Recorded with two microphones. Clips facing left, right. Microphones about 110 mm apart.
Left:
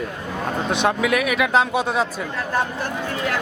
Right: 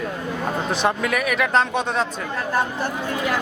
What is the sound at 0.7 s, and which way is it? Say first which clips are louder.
Speech: left 3 dB; centre (ahead or behind).